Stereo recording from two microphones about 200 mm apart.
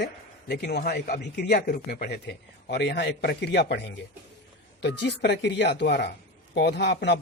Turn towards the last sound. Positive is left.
turn(degrees=60)  # may be behind; listen again after turning